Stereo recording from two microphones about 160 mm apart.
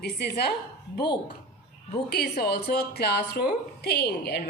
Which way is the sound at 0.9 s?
30° left (ahead or behind).